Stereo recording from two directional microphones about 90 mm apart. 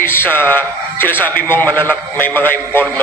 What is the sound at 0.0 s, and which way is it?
A man's voice, 25° left (ahead or behind).